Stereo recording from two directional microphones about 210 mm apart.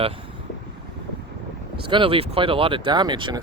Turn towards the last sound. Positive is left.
turn(degrees=-20)  # may be behind; listen again after turning